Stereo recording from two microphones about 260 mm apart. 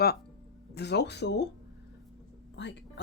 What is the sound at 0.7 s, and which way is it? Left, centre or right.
Speech, left.